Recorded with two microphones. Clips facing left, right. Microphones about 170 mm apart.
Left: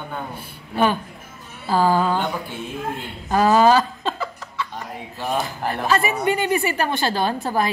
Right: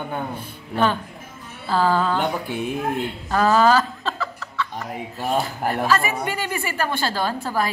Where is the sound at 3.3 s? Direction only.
15° left (ahead or behind).